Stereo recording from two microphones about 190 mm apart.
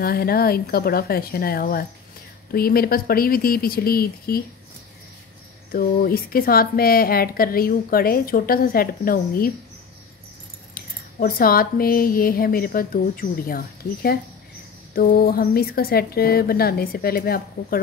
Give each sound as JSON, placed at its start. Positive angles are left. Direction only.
{"t": 0.0, "sound": "a woman's voice", "side_deg": 55}
{"t": 5.7, "sound": "a woman's voice", "side_deg": 50}
{"t": 10.7, "sound": "a woman's voice", "side_deg": 50}